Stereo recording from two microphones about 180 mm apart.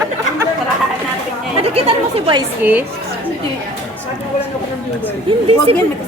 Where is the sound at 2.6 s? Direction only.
10° right (ahead or behind).